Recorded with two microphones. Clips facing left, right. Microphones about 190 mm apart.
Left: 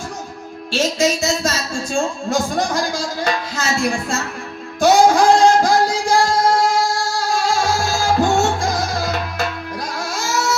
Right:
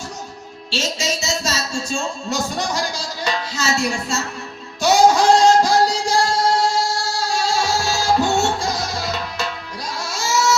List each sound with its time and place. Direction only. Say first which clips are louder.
0.7 s speech: left 6 dB; 55° left (ahead or behind)
4.8 s music: left 2 dB; 55° left (ahead or behind)